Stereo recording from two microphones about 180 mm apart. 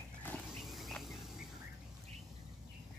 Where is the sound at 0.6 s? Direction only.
Centre (ahead or behind).